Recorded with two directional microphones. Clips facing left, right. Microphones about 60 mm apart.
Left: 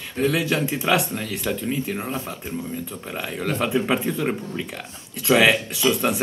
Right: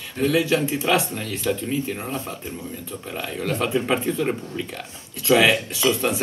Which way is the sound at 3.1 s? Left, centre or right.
Centre.